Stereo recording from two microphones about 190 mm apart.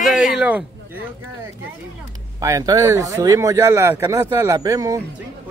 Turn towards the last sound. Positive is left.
turn(degrees=-20)  # may be behind; listen again after turning